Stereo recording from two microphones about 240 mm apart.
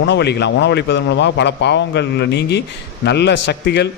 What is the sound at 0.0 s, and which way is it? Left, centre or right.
A man's voice, left.